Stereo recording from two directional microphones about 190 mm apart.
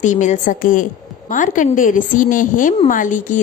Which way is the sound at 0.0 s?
40° left (ahead or behind).